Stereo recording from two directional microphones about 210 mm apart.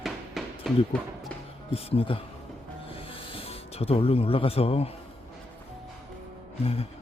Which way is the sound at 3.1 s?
25° left (ahead or behind).